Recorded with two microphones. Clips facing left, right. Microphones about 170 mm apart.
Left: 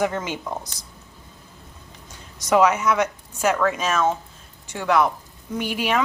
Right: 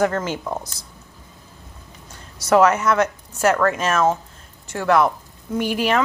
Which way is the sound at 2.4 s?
10° left (ahead or behind).